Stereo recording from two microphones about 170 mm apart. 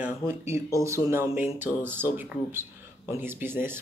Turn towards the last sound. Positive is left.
turn(degrees=-15)  # may be behind; listen again after turning